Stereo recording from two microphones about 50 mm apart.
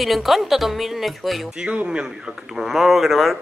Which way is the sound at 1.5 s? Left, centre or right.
Right.